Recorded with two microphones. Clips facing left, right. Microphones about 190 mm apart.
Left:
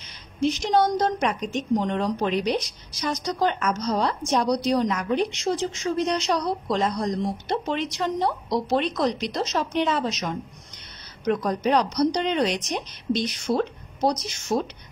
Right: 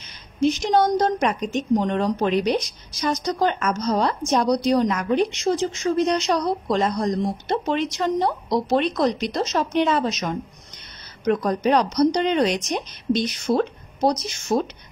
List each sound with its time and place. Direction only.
0.4 s speech: 45° right (ahead or behind)